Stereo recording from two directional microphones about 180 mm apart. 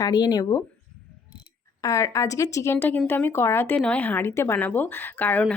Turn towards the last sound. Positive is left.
turn(degrees=10)  # may be behind; listen again after turning